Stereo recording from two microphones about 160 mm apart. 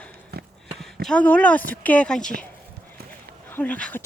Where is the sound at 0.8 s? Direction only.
5° left (ahead or behind).